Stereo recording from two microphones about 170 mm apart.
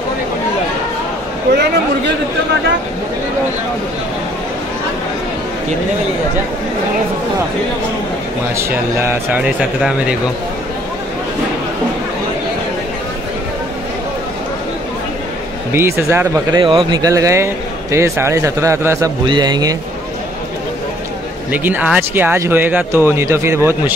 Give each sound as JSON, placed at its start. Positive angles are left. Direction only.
{"t": 8.5, "sound": "speech", "side_deg": -15}
{"t": 15.7, "sound": "speech", "side_deg": -15}
{"t": 16.6, "sound": "speech", "side_deg": -25}
{"t": 21.5, "sound": "speech", "side_deg": -10}